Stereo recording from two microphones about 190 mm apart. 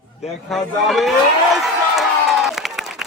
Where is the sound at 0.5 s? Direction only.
Centre (ahead or behind).